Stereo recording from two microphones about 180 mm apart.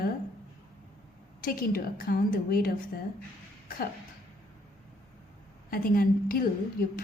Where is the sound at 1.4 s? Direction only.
55° left (ahead or behind).